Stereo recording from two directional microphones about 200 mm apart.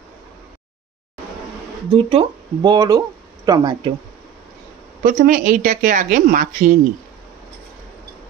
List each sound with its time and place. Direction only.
2.0 s speech: 25° right (ahead or behind)
5.0 s a woman's voice: 45° right (ahead or behind)